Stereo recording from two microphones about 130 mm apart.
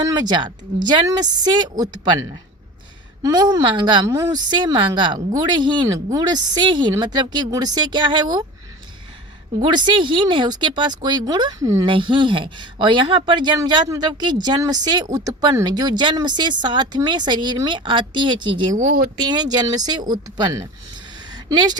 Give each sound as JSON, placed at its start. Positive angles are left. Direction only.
{"t": 0.1, "sound": "speech", "side_deg": -35}
{"t": 3.2, "sound": "speech", "side_deg": -30}
{"t": 9.6, "sound": "speech", "side_deg": -35}